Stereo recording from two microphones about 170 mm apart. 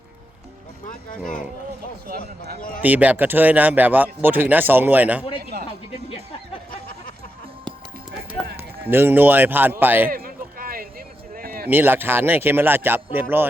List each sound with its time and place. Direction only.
2.0 s speech: 65° right (ahead or behind)
2.8 s speech: 10° right (ahead or behind)
8.9 s speech: 10° right (ahead or behind)
10.1 s a sound: 55° right (ahead or behind)
11.7 s speech: 10° right (ahead or behind)